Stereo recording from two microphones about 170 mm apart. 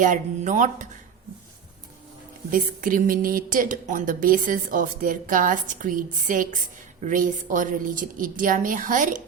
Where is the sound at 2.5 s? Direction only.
55° right (ahead or behind).